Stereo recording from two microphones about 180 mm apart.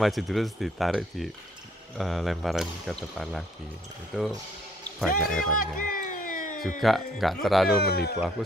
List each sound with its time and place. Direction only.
0.0 s speech: centre (ahead or behind)
5.6 s music: 50° left (ahead or behind)
6.8 s speech: centre (ahead or behind)
7.8 s speech: 60° left (ahead or behind)
8.4 s speech: centre (ahead or behind)